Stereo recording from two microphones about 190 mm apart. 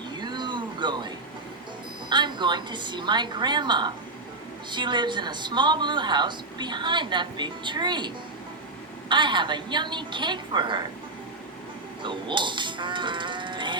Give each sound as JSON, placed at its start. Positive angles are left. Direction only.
{"t": 0.2, "sound": "a sound", "side_deg": -25}
{"t": 2.0, "sound": "a woman's voice", "side_deg": -25}
{"t": 12.0, "sound": "speech", "side_deg": -25}